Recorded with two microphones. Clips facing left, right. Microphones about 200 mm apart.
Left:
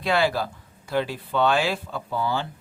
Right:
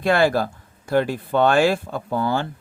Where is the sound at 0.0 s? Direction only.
50° right (ahead or behind).